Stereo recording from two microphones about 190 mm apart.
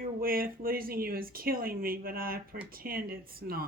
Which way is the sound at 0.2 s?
50° right (ahead or behind).